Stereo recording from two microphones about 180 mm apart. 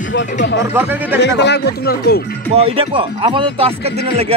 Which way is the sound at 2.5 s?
30° right (ahead or behind).